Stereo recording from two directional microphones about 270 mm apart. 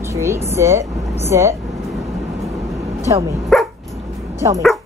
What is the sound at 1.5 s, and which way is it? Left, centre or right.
Vehicle, centre.